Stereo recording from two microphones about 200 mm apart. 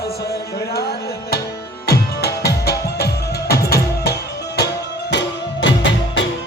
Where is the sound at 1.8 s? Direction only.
50° left (ahead or behind).